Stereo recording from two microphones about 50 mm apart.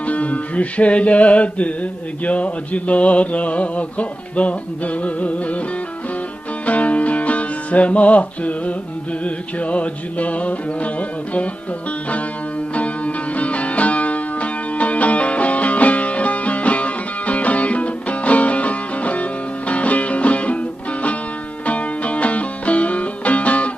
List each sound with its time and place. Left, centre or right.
0.0 s music: left
6.7 s music: left
12.7 s music: left
21.7 s music: left